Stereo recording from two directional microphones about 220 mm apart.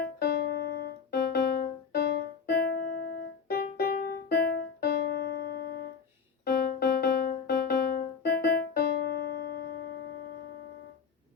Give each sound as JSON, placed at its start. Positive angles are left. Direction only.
{"t": 0.0, "sound": "music", "side_deg": 45}
{"t": 2.5, "sound": "keyboard", "side_deg": 45}
{"t": 3.5, "sound": "music", "side_deg": 45}